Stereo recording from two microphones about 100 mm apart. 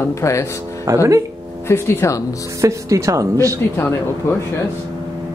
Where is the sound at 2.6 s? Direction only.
30° right (ahead or behind).